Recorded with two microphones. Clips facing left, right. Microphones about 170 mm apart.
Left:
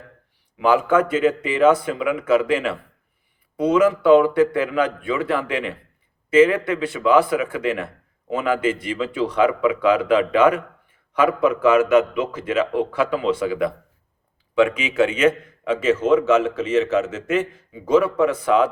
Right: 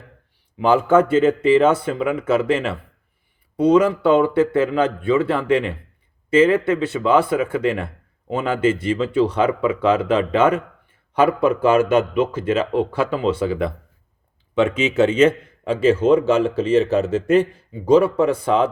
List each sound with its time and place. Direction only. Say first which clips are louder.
0.6 s a man's voice: right 2 dB; 25° right (ahead or behind)